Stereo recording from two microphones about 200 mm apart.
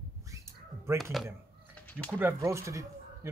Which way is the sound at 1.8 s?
5° left (ahead or behind).